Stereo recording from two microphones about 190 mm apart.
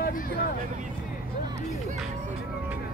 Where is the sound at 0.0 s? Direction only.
50° left (ahead or behind).